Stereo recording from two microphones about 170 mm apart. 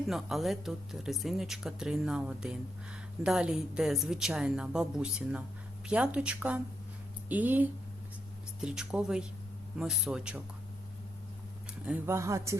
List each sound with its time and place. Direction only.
0.1 s speech: centre (ahead or behind)
11.9 s speech: 15° right (ahead or behind)